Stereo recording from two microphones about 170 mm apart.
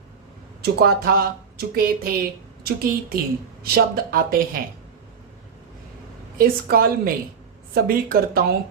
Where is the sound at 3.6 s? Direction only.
60° right (ahead or behind).